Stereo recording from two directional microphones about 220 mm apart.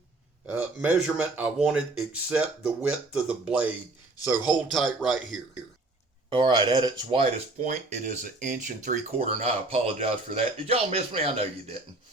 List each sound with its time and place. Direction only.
0.4 s speech: 5° right (ahead or behind)
6.3 s speech: 20° right (ahead or behind)